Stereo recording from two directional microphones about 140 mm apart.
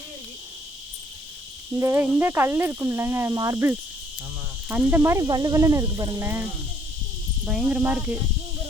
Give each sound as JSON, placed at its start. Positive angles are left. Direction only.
{"t": 1.7, "sound": "cricket", "side_deg": -20}
{"t": 6.2, "sound": "speech", "side_deg": -15}